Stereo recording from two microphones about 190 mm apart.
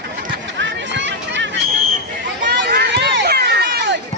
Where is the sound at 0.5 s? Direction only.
70° right (ahead or behind).